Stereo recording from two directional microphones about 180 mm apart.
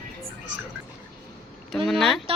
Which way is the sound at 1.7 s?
Centre (ahead or behind).